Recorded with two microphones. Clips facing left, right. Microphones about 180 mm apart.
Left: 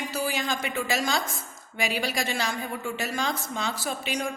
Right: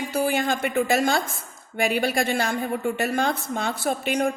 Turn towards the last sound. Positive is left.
turn(degrees=-55)  # may be behind; listen again after turning